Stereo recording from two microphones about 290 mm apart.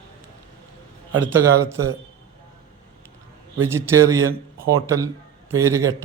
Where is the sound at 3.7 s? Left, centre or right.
Centre.